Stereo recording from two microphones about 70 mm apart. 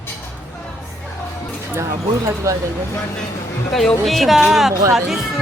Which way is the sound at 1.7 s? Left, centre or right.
Right.